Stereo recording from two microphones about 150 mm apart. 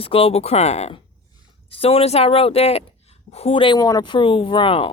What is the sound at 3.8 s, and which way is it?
Speech, 25° left (ahead or behind).